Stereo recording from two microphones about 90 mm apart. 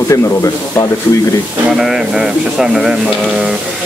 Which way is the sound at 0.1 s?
35° left (ahead or behind).